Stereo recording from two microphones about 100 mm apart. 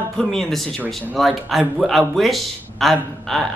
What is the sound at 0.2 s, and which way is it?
A man's voice, 5° left (ahead or behind).